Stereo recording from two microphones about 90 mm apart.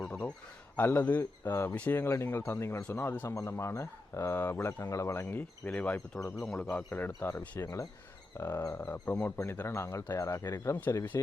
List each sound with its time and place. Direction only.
0.1 s a sound: 15° left (ahead or behind)
0.8 s speech: 20° left (ahead or behind)
3.2 s speech: 35° left (ahead or behind)
4.8 s speech: 35° left (ahead or behind)
5.3 s speech: 20° left (ahead or behind)
6.3 s a man's voice: 5° left (ahead or behind)
6.6 s speech: 15° left (ahead or behind); by 11.3 s 35° left (ahead or behind)